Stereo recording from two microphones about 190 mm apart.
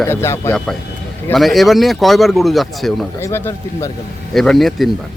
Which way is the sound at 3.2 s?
15° left (ahead or behind).